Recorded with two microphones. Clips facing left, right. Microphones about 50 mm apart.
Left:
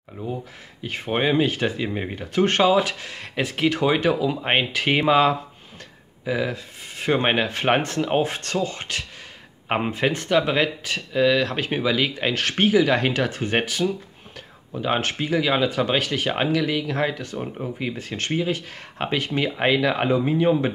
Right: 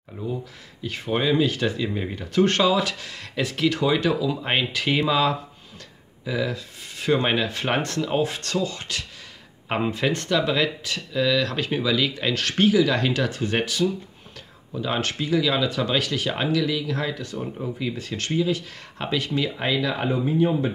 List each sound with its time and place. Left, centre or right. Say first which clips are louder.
0.8 s speech: left 1 dB; left
10.3 s speech: left 3 dB; left
19.7 s speech: left 4 dB; left